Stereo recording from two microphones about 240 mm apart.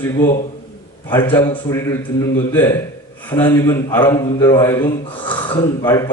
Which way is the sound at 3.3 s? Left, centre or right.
Centre.